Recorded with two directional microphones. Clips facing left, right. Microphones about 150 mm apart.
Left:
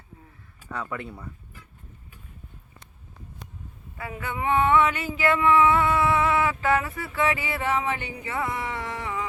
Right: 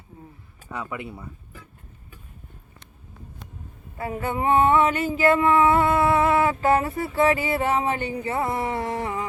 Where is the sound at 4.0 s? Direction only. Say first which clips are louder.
Right 5 dB; 40° right (ahead or behind).